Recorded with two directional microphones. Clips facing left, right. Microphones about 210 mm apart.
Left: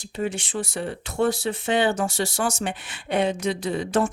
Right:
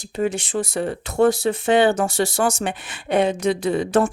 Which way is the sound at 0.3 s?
40° right (ahead or behind).